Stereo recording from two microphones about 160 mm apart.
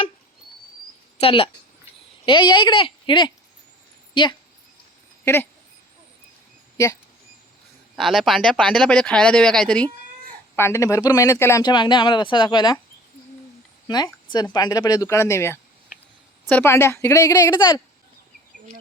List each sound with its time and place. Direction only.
1.2 s a woman's voice: 35° left (ahead or behind)
5.2 s speech: 15° left (ahead or behind)
7.9 s a woman's voice: centre (ahead or behind); by 11.6 s 15° left (ahead or behind)
11.6 s a woman's voice: 30° left (ahead or behind)
13.8 s a woman's voice: 25° left (ahead or behind)